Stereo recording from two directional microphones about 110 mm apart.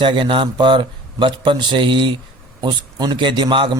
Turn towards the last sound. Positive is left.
turn(degrees=-50)  # may be behind; listen again after turning